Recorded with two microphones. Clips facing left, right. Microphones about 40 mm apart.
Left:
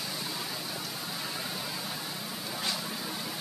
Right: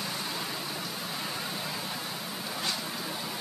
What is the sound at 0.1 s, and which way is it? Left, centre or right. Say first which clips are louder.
Vehicle: right 2 dB; right.